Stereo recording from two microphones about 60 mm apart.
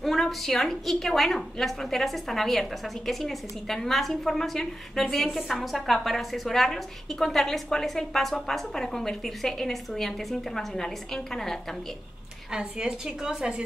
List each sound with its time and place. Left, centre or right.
0.0 s a woman's voice: centre
12.4 s a woman's voice: centre